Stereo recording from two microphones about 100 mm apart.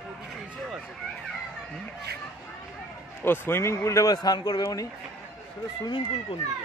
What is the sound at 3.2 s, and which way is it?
A man's voice, 20° left (ahead or behind).